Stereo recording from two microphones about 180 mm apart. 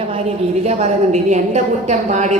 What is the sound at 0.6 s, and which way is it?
A woman's voice, 40° right (ahead or behind).